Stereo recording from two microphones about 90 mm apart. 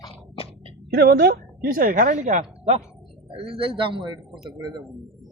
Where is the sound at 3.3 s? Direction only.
90° right; by 4.8 s 55° right (ahead or behind).